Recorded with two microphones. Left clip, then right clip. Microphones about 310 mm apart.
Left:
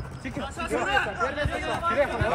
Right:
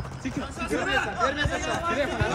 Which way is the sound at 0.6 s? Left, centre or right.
Centre.